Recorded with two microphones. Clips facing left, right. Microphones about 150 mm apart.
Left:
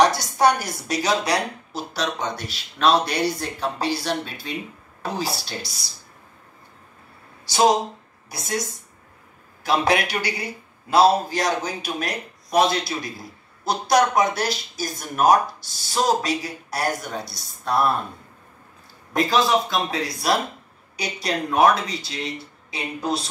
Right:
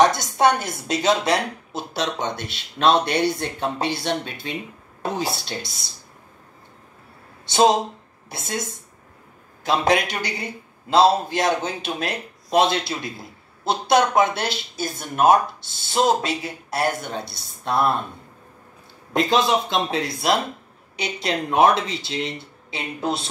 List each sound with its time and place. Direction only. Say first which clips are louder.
0.0 s a woman's voice: right 1 dB; 20° right (ahead or behind)
7.4 s a woman's voice: right 1 dB; 25° right (ahead or behind)
19.1 s a woman's voice: even; 25° right (ahead or behind)